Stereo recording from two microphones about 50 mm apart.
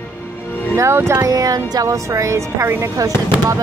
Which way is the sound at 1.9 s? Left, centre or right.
Right.